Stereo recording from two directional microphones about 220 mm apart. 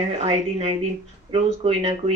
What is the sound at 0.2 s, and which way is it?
Speech, 30° right (ahead or behind).